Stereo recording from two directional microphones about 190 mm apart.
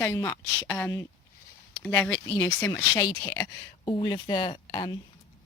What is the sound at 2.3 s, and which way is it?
Speech, 15° left (ahead or behind).